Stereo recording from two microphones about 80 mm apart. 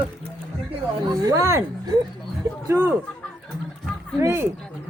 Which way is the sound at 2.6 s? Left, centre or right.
Right.